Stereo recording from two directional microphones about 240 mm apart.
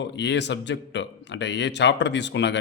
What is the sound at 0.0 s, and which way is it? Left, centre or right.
Speech, left.